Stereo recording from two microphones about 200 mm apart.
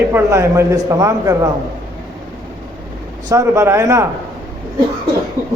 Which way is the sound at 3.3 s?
15° right (ahead or behind).